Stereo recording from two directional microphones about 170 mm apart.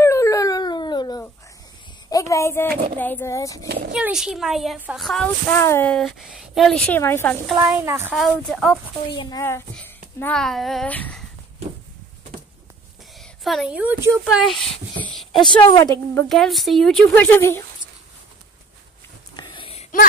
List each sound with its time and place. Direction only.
0.0 s a sound: 15° left (ahead or behind)
2.0 s a woman's voice: 20° left (ahead or behind)
3.6 s speech: 65° right (ahead or behind)
3.9 s speech: 5° right (ahead or behind)
5.5 s speech: 15° left (ahead or behind)
6.9 s speech: 15° left (ahead or behind)
7.5 s a woman's voice: 15° right (ahead or behind)
8.1 s speech: centre (ahead or behind)
9.4 s speech: 15° left (ahead or behind)
13.2 s a woman's voice: centre (ahead or behind)
14.3 s a sound: centre (ahead or behind)
15.6 s speech: 20° left (ahead or behind)
16.3 s speech: centre (ahead or behind)
19.3 s a sound: 30° left (ahead or behind)